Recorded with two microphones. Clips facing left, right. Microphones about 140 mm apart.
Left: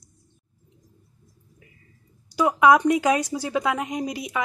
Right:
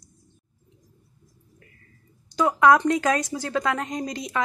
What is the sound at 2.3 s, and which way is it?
Speech, 10° left (ahead or behind).